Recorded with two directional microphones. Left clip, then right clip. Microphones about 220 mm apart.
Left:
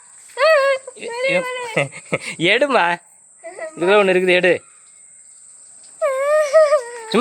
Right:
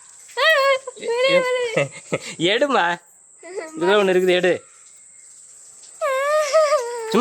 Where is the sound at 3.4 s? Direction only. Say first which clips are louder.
Left 1 dB; 45° right (ahead or behind).